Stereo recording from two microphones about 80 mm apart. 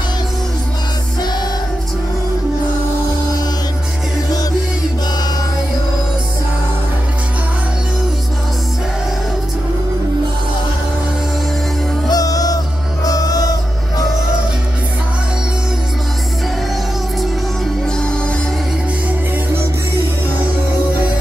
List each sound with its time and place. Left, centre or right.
12.1 s music: left